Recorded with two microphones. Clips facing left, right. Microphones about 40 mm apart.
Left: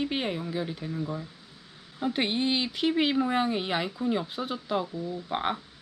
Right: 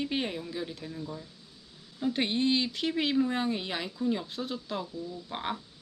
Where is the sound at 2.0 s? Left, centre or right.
Left.